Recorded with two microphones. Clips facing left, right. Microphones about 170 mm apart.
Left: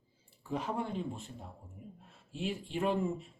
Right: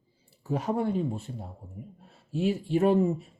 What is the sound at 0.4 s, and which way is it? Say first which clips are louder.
Speech: right 8 dB; 45° right (ahead or behind).